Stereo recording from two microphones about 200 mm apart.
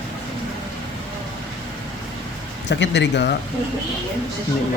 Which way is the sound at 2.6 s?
65° left (ahead or behind).